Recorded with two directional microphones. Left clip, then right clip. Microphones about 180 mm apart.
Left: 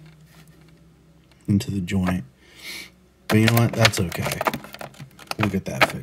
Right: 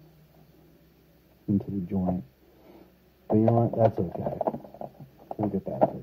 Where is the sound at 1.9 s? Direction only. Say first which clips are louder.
Left 4 dB; 25° left (ahead or behind).